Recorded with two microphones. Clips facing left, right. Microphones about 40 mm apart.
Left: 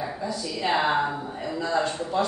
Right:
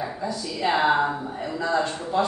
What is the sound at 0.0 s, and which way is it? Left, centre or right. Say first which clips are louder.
A woman's voice: right 1 dB; centre.